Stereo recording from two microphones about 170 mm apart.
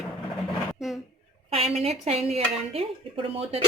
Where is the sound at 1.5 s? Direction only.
35° right (ahead or behind).